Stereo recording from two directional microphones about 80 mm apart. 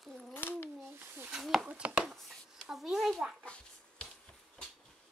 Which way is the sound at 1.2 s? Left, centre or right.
Centre.